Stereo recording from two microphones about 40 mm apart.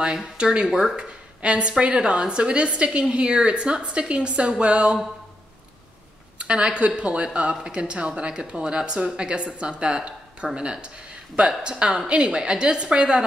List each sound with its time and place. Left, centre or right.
0.0 s a woman's voice: centre
0.7 s speech: centre
0.9 s a woman's voice: right
6.3 s a woman's voice: right